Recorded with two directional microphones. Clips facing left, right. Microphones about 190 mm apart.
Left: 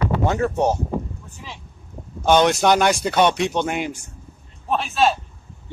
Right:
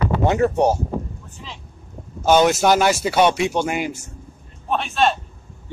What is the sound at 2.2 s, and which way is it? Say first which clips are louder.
Speech: right 1 dB; 5° right (ahead or behind).